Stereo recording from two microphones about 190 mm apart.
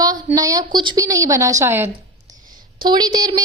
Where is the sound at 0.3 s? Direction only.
20° right (ahead or behind).